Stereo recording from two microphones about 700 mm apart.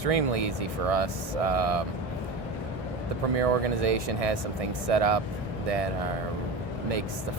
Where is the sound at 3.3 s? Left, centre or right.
Right.